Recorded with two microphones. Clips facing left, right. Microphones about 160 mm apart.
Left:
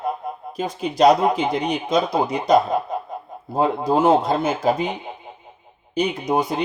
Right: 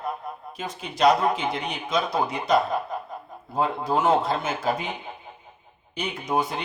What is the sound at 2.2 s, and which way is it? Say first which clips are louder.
Speech: left 4 dB; 20° left (ahead or behind).